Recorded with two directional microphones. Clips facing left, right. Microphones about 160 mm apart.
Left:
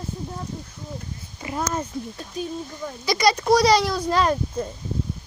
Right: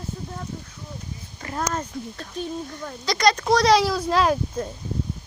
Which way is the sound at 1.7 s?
5° left (ahead or behind).